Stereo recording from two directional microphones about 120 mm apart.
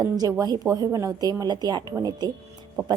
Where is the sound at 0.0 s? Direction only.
30° right (ahead or behind).